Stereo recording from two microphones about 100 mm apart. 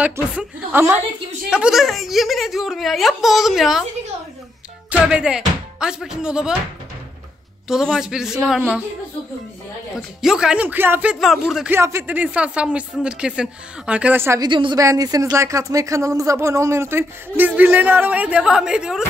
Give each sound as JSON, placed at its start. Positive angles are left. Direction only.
{"t": 0.7, "sound": "speech", "side_deg": -25}
{"t": 1.5, "sound": "speech", "side_deg": -5}
{"t": 4.9, "sound": "speech", "side_deg": -10}
{"t": 7.6, "sound": "speech", "side_deg": -5}
{"t": 9.9, "sound": "speech", "side_deg": -5}
{"t": 11.1, "sound": "speech", "side_deg": 0}
{"t": 11.7, "sound": "speech", "side_deg": -25}
{"t": 14.1, "sound": "speech", "side_deg": -25}
{"t": 14.4, "sound": "speech", "side_deg": -50}
{"t": 14.8, "sound": "speech", "side_deg": -35}